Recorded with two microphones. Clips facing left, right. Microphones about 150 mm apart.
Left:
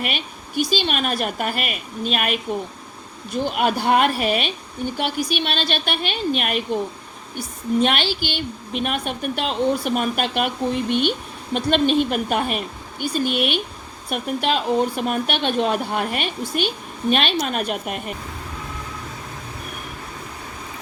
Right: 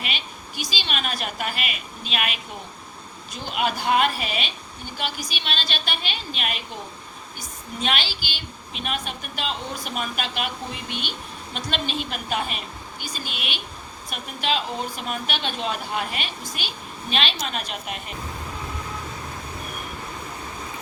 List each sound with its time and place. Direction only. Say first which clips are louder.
0.0 s a woman's voice: left 6 dB; 50° left (ahead or behind)